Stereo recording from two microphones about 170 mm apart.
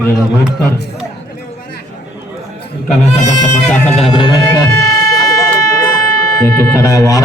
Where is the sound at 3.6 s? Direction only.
30° left (ahead or behind).